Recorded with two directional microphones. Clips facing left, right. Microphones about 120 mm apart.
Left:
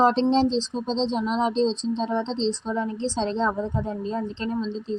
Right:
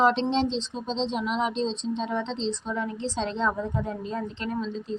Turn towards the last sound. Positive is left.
turn(degrees=30)  # may be behind; listen again after turning